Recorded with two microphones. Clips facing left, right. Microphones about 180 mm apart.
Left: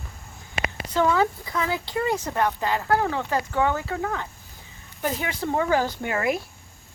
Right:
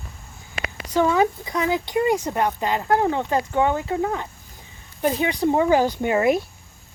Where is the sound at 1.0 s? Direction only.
15° right (ahead or behind).